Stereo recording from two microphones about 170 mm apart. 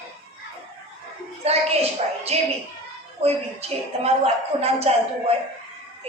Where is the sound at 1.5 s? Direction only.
35° right (ahead or behind).